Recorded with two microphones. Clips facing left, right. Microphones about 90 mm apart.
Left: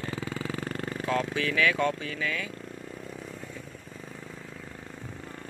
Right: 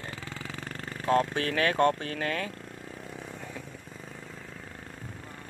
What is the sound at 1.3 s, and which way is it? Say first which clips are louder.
Speech: even; 45° right (ahead or behind).